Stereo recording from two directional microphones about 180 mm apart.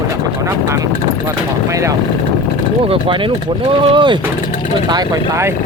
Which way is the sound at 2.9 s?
30° right (ahead or behind).